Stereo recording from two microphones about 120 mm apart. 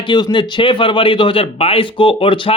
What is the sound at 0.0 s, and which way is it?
Speech, 40° left (ahead or behind).